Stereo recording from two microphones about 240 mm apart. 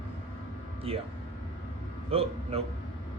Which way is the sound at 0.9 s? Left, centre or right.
Right.